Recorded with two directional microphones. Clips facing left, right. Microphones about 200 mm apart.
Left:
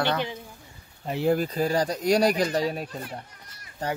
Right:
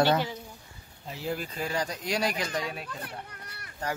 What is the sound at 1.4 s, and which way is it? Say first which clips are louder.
Speech: left 8 dB; 40° left (ahead or behind).